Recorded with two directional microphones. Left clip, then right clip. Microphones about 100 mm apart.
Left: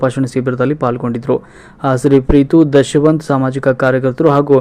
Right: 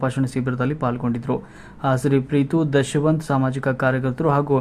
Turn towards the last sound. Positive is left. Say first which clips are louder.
# left 9 dB
turn(degrees=35)  # may be behind; listen again after turning